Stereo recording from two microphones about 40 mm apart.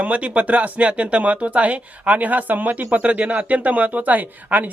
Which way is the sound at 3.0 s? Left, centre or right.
Right.